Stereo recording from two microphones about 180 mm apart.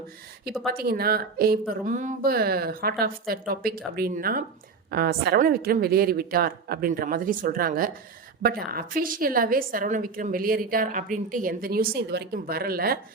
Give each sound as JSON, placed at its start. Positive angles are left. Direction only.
{"t": 0.7, "sound": "a woman's voice", "side_deg": -55}